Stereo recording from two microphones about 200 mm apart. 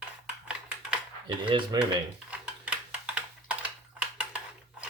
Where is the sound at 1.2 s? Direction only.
25° right (ahead or behind).